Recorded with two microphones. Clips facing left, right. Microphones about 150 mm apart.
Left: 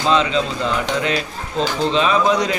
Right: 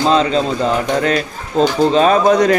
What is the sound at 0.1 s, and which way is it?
Speech, 40° right (ahead or behind).